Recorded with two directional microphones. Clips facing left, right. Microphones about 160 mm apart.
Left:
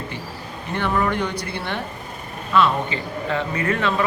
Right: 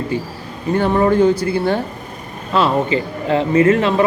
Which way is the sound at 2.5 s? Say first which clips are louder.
Right 4 dB; 35° right (ahead or behind).